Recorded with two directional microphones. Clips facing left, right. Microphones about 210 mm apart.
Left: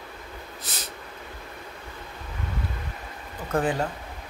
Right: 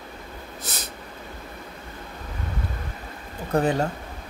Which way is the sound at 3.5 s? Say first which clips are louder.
Right 3 dB; 40° right (ahead or behind).